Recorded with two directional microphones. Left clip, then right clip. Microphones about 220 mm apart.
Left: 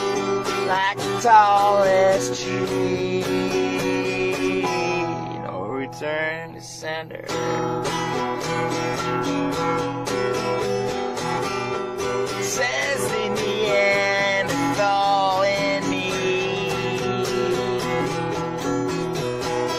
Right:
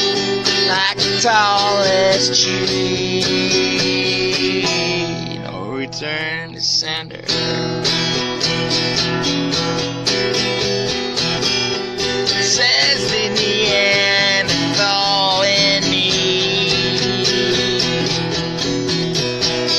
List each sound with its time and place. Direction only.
0.7 s music: 25° right (ahead or behind)
1.7 s music: 35° right (ahead or behind)
12.5 s music: 25° right (ahead or behind)